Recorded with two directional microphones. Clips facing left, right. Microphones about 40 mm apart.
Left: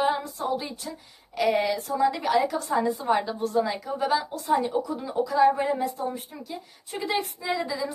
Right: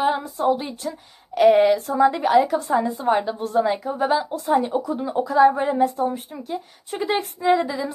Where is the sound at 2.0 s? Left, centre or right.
Right.